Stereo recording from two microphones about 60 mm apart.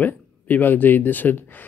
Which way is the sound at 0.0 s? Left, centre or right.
Left.